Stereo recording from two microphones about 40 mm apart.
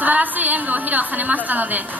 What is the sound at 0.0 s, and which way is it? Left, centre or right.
A woman's voice, right.